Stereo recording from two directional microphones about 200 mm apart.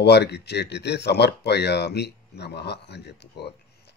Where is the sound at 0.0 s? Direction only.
55° left (ahead or behind).